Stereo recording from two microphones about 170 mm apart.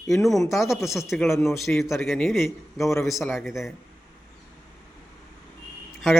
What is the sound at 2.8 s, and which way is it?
Speech, 15° left (ahead or behind).